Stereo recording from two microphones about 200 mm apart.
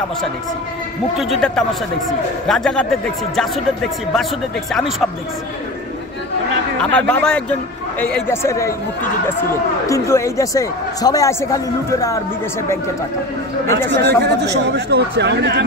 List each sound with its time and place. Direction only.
1.1 s a man's voice: centre (ahead or behind)
6.8 s speech: 5° left (ahead or behind)
9.8 s speech: 15° left (ahead or behind)
13.8 s speech: 55° right (ahead or behind)